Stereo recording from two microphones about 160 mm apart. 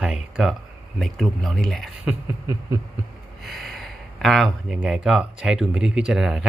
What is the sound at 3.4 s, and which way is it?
Speech, centre (ahead or behind).